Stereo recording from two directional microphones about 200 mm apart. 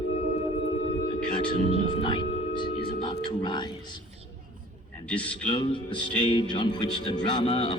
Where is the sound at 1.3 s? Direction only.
25° left (ahead or behind).